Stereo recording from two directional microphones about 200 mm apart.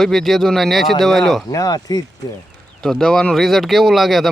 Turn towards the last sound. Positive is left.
turn(degrees=0)  # may be behind; listen again after turning